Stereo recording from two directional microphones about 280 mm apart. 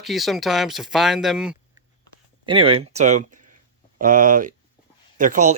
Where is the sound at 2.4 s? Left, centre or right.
Centre.